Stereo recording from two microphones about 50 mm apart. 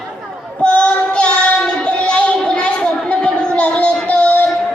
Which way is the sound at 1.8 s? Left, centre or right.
Left.